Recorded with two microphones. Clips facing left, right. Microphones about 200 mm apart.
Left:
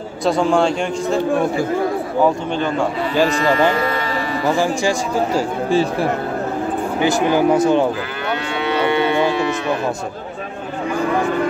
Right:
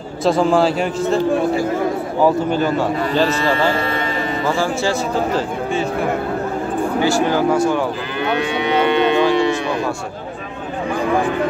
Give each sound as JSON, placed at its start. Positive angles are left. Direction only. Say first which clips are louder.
{"t": 0.2, "sound": "speech", "louder": "right 1 dB", "side_deg": 0}
{"t": 4.6, "sound": "speech", "louder": "left 1 dB", "side_deg": 15}
{"t": 5.7, "sound": "speech", "louder": "left 5 dB", "side_deg": 35}
{"t": 7.0, "sound": "speech", "louder": "left 1 dB", "side_deg": 20}
{"t": 8.6, "sound": "cattle", "louder": "right 1 dB", "side_deg": -20}